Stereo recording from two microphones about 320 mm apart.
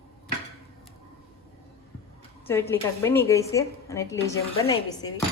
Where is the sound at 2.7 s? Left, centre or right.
Centre.